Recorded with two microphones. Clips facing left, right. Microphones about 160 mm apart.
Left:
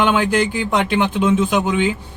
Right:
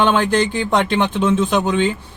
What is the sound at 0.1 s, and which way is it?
A man's voice, 10° left (ahead or behind).